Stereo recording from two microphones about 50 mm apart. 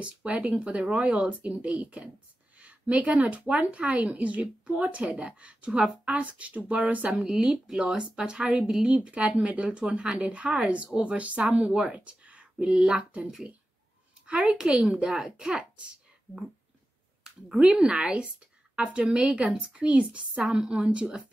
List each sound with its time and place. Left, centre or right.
0.0 s speech: right
7.2 s speech: centre
11.9 s a sound: right
12.6 s speech: centre
12.9 s a woman's voice: right
17.7 s speech: centre
20.4 s speech: centre